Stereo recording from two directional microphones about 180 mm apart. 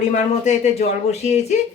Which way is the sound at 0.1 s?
40° left (ahead or behind).